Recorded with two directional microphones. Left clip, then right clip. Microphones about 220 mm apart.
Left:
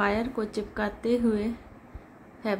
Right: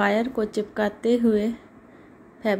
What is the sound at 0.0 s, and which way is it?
A woman's voice, 20° right (ahead or behind).